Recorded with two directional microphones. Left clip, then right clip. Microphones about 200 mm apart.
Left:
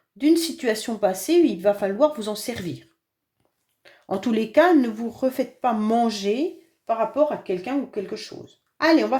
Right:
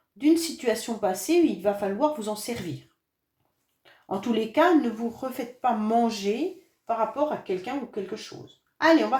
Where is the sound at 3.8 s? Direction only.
45° left (ahead or behind).